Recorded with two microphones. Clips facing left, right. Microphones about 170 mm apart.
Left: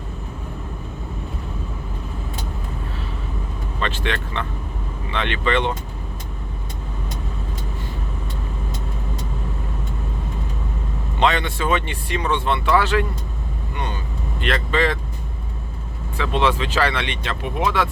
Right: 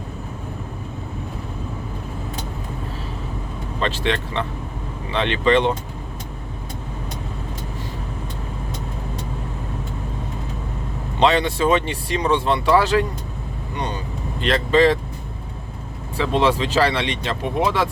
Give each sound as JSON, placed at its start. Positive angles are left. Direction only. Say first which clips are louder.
{"t": 3.8, "sound": "speech", "louder": "right 3 dB", "side_deg": -30}
{"t": 11.2, "sound": "speech", "louder": "right 3 dB", "side_deg": -30}
{"t": 14.4, "sound": "speech", "louder": "right 5 dB", "side_deg": -30}
{"t": 16.1, "sound": "speech", "louder": "right 2 dB", "side_deg": -35}